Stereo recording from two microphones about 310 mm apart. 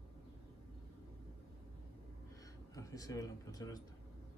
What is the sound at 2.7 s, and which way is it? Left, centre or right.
Speech, centre.